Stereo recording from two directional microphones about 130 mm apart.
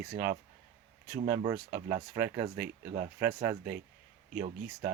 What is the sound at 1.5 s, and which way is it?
Speech, 20° right (ahead or behind).